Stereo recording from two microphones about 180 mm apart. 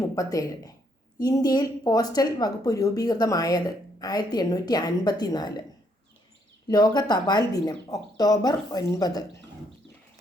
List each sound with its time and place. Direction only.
0.2 s speech: 20° left (ahead or behind)
6.7 s speech: 25° left (ahead or behind)